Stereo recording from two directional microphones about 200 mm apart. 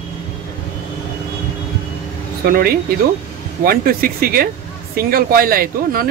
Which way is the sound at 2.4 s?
50° right (ahead or behind).